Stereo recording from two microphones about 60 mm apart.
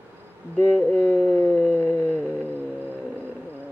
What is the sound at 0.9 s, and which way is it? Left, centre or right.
Speech, left.